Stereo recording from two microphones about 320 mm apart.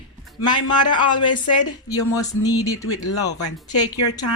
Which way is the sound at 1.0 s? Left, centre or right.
Centre.